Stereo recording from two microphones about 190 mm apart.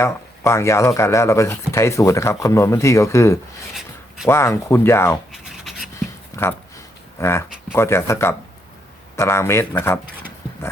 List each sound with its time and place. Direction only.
0.0 s speech: 15° left (ahead or behind)
5.3 s scratch: centre (ahead or behind)
6.3 s a sound: 15° left (ahead or behind)
7.2 s speech: 15° left (ahead or behind)